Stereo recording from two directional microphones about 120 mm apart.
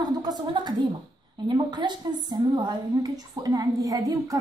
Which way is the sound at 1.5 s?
40° right (ahead or behind).